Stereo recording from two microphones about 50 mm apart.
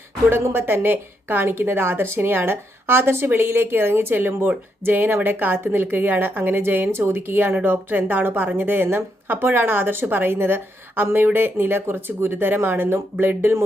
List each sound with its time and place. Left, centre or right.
0.5 s a woman's voice: right